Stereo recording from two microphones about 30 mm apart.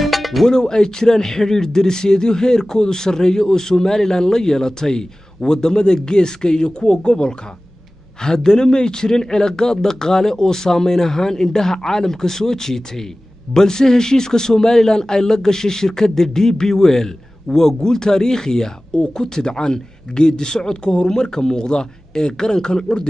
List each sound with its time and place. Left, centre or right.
0.0 s music: centre
0.5 s speech: left
8.5 s speech: left